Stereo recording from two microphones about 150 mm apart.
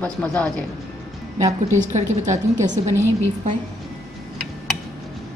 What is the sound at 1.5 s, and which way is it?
A woman's voice, 50° right (ahead or behind).